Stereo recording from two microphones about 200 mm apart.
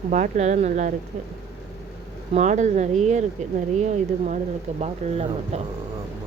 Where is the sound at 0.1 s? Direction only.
35° right (ahead or behind).